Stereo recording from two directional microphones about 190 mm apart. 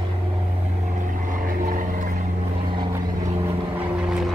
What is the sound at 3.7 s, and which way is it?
Vehicle, 5° right (ahead or behind).